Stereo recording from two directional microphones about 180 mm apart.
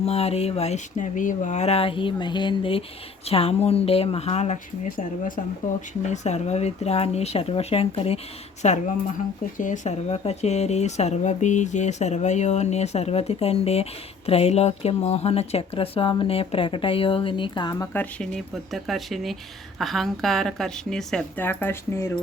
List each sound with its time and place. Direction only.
0.0 s speech: 35° left (ahead or behind)
6.1 s speech: 40° left (ahead or behind)
17.9 s a woman's voice: 5° left (ahead or behind)